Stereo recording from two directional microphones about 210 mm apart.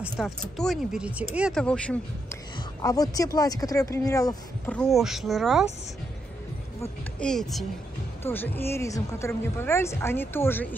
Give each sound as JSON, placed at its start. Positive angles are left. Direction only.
{"t": 0.0, "sound": "speech", "side_deg": 0}
{"t": 2.5, "sound": "speech", "side_deg": 15}
{"t": 4.7, "sound": "speech", "side_deg": 0}
{"t": 7.2, "sound": "speech", "side_deg": 0}